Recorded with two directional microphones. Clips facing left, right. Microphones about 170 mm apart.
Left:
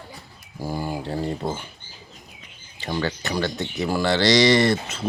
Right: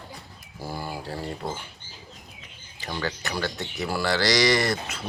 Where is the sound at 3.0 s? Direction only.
25° left (ahead or behind).